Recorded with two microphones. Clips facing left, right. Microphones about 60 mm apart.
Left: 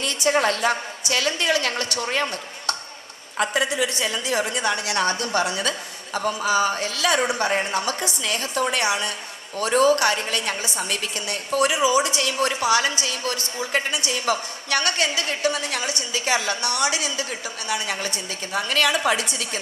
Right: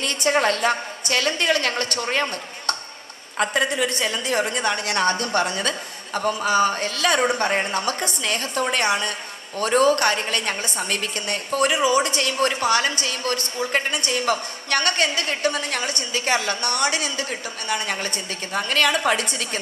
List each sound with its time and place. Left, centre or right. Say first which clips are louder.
0.0 s a woman's voice: even; right
3.3 s a woman's voice: right 1 dB; right